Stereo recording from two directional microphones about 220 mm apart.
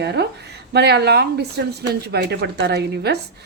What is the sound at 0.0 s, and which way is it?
Speech, 50° right (ahead or behind).